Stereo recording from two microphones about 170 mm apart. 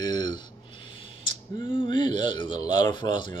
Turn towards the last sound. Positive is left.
turn(degrees=30)  # may be behind; listen again after turning